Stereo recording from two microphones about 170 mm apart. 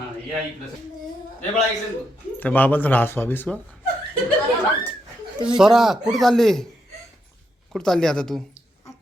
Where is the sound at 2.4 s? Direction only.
10° left (ahead or behind).